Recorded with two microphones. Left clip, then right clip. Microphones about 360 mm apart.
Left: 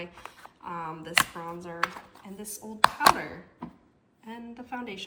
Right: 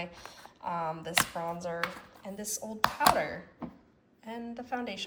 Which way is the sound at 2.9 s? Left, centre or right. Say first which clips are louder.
Left 3 dB; centre.